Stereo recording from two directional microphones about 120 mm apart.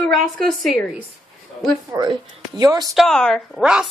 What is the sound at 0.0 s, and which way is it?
Speech, 5° left (ahead or behind).